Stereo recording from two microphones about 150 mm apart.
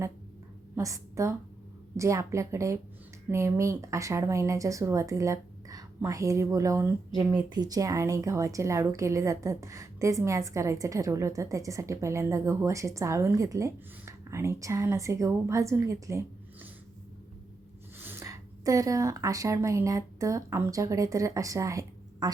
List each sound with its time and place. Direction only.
0.8 s a woman's voice: 20° right (ahead or behind)
18.0 s a woman's voice: 15° right (ahead or behind)